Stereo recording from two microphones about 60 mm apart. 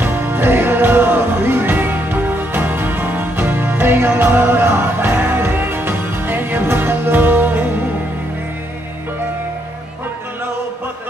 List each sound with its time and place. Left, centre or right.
0.0 s music: right